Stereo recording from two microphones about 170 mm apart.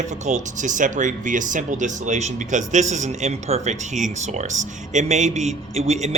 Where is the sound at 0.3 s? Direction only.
45° right (ahead or behind).